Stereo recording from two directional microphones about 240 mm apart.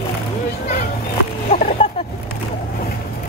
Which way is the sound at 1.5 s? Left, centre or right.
Left.